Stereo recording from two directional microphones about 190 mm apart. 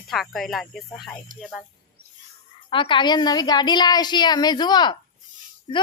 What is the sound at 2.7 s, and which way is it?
A woman's voice, 25° left (ahead or behind).